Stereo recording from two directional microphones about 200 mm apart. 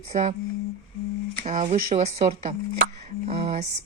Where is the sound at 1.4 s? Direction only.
40° right (ahead or behind).